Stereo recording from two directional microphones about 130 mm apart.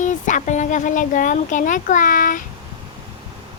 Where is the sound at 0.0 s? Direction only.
70° left (ahead or behind); by 2.4 s 90° left.